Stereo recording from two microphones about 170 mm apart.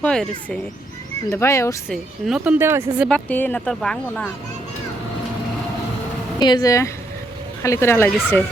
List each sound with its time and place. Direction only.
0.0 s speech: 5° left (ahead or behind)
1.3 s speech: 15° left (ahead or behind)
1.9 s a woman's voice: centre (ahead or behind)
3.1 s speech: 10° left (ahead or behind)
6.4 s speech: 25° left (ahead or behind)